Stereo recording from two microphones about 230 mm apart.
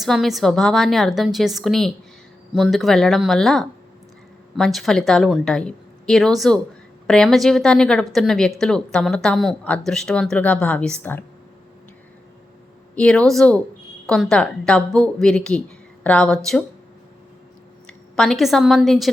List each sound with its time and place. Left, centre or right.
0.0 s a woman's voice: centre
13.0 s a woman's voice: centre
17.8 s a woman's voice: centre